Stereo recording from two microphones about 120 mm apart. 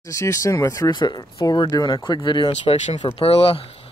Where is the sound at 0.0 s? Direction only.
25° left (ahead or behind).